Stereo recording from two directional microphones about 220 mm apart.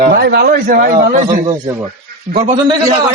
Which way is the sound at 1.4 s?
15° right (ahead or behind).